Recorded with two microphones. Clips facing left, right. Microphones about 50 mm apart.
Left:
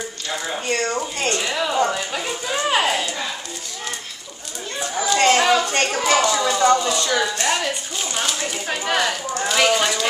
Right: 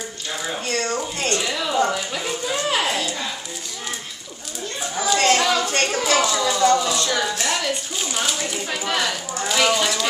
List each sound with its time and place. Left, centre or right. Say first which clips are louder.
0.7 s a sound: left 2 dB; centre
4.9 s chatter: left 2 dB; centre
5.6 s chatter: left 1 dB; centre
6.0 s a sound: left 3 dB; centre
6.9 s speech: left 1 dB; centre
8.7 s speech: left 3 dB; centre